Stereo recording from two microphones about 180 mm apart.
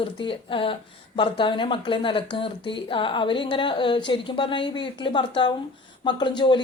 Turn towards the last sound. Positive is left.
turn(degrees=25)  # may be behind; listen again after turning